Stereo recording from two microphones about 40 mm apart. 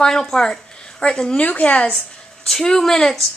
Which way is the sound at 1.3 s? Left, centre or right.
Left.